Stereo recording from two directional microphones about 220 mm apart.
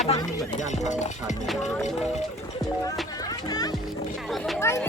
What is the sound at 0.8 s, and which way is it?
Music, 35° left (ahead or behind).